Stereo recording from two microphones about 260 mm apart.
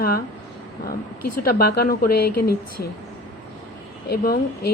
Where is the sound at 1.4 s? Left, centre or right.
Left.